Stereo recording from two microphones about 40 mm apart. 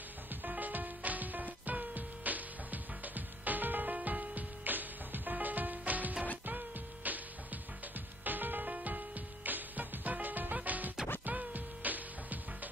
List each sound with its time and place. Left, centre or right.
0.4 s music: right
8.2 s music: right